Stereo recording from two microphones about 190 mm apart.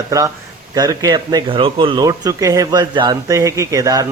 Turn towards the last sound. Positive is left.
turn(degrees=-20)  # may be behind; listen again after turning